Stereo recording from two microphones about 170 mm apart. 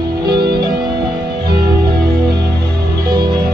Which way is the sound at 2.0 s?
70° right (ahead or behind).